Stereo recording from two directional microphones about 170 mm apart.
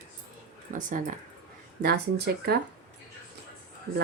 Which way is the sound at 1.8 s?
70° right (ahead or behind).